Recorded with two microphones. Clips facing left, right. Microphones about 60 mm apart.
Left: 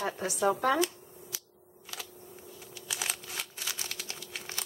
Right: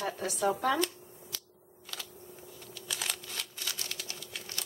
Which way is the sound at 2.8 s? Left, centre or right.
Centre.